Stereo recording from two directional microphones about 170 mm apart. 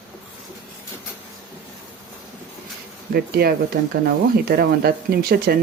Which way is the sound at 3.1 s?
65° right (ahead or behind).